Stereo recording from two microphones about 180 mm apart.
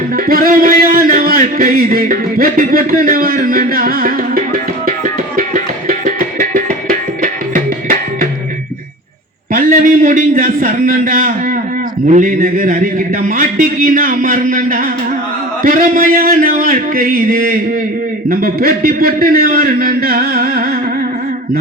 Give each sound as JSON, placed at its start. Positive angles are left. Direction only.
{"t": 0.3, "sound": "a man's voice", "side_deg": -55}
{"t": 6.1, "sound": "music", "side_deg": -50}
{"t": 9.5, "sound": "a sound", "side_deg": -50}
{"t": 12.1, "sound": "a man's voice", "side_deg": -50}